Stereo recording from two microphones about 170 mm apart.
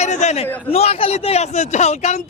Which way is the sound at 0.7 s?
35° left (ahead or behind).